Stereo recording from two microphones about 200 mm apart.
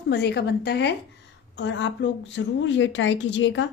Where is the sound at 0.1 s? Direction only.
55° left (ahead or behind).